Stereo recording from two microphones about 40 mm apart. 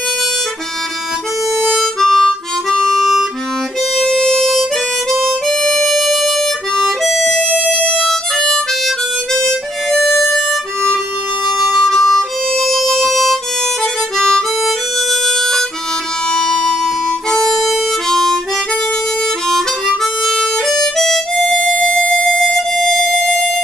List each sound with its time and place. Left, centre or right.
1.7 s harmonica: centre
7.4 s music: right
8.0 s harmonica: centre
10.2 s music: centre
11.5 s harmonica: centre
19.4 s harmonica: centre
21.7 s a sound: left
22.4 s music: centre
23.0 s a sound: left